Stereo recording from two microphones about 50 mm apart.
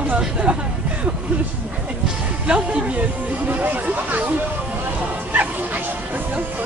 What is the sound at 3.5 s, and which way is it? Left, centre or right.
Speech, right.